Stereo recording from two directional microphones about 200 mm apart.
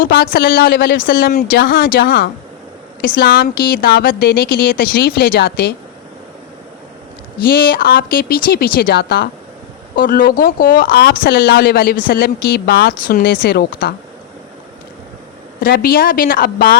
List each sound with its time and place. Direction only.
0.0 s speech: 50° left (ahead or behind)
7.4 s speech: 50° left (ahead or behind)
15.6 s speech: 50° left (ahead or behind)